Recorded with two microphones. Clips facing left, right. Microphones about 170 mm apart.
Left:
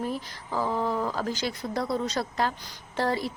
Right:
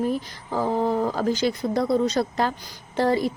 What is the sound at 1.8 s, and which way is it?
Speech, 50° right (ahead or behind).